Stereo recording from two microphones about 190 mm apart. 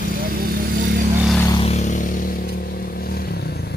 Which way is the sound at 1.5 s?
35° left (ahead or behind).